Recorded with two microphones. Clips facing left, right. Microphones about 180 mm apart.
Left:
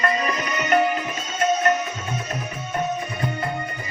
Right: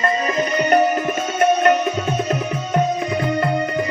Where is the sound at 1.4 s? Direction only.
65° right (ahead or behind).